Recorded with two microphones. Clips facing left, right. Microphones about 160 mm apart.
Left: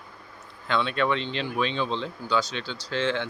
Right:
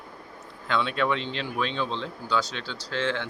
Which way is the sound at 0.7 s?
5° right (ahead or behind).